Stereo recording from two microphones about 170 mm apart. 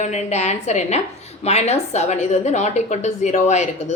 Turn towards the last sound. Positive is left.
turn(degrees=45)  # may be behind; listen again after turning